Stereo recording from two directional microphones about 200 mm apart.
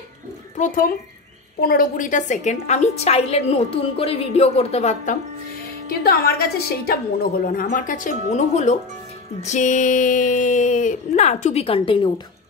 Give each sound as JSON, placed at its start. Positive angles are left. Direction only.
{"t": 0.6, "sound": "a woman's voice", "side_deg": 45}
{"t": 5.9, "sound": "a woman's voice", "side_deg": 50}